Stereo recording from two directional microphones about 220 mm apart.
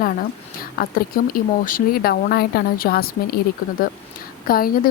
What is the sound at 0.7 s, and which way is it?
Speech, 40° left (ahead or behind).